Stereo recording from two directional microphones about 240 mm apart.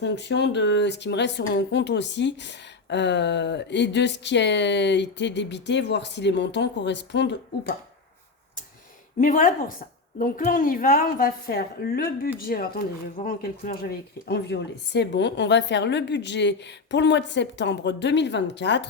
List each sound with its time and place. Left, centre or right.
0.0 s speech: left
9.2 s a woman's voice: left